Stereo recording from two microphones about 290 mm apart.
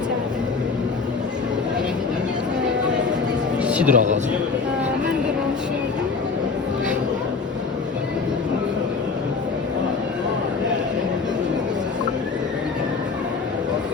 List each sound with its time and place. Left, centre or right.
3.6 s music: centre
3.9 s a man's voice: right